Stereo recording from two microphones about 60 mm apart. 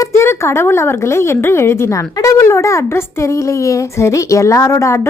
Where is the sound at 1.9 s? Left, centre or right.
Left.